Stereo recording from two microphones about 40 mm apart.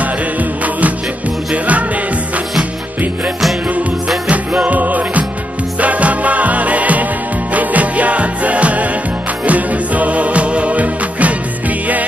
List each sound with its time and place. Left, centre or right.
0.0 s music: right
4.3 s music: right